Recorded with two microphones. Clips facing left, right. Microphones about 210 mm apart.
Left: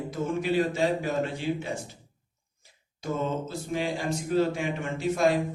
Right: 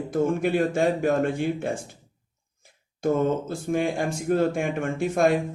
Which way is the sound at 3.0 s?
50° right (ahead or behind).